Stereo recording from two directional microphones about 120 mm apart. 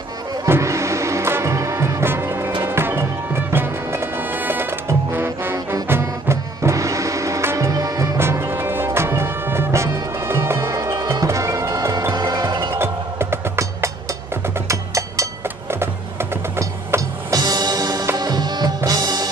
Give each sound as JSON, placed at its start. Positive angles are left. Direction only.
{"t": 0.5, "sound": "music", "side_deg": -25}